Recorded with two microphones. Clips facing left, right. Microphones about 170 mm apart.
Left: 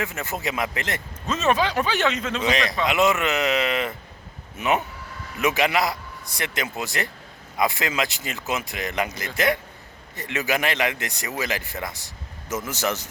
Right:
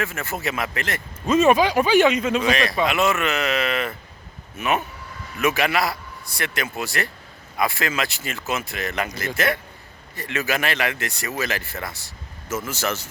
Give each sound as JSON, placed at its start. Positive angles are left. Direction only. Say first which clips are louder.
{"t": 0.0, "sound": "speech", "louder": "right 1 dB", "side_deg": 20}
{"t": 1.3, "sound": "speech", "louder": "right 6 dB", "side_deg": -10}
{"t": 2.4, "sound": "a man's voice", "louder": "right 2 dB", "side_deg": 20}